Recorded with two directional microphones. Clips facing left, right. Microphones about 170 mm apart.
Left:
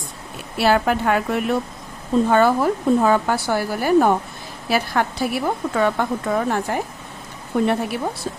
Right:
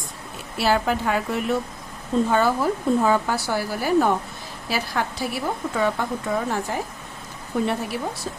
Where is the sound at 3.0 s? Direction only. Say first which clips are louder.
Left 3 dB; 55° left (ahead or behind).